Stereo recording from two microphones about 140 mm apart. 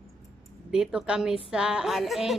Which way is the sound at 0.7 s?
5° right (ahead or behind).